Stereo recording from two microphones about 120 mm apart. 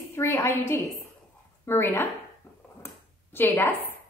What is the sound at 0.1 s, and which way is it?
A woman's voice, 25° left (ahead or behind).